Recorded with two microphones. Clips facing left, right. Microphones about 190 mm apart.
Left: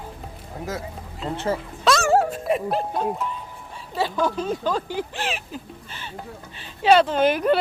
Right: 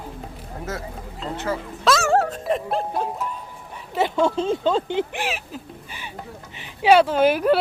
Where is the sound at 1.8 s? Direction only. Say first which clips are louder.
Even; centre (ahead or behind).